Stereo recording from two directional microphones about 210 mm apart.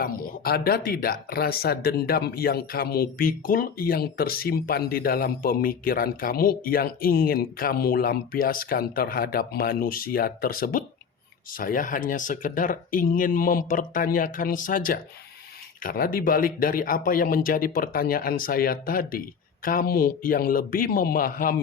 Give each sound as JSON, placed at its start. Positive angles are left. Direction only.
{"t": 0.0, "sound": "speech", "side_deg": 45}